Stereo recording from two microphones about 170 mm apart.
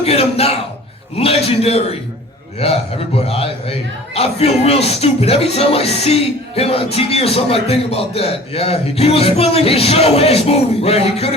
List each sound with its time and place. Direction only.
0.0 s a man's voice: 35° left (ahead or behind)